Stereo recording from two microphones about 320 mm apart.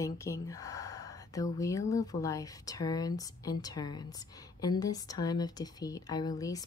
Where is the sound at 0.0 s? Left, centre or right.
Centre.